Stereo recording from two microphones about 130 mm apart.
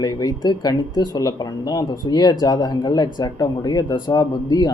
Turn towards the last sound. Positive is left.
turn(degrees=30)  # may be behind; listen again after turning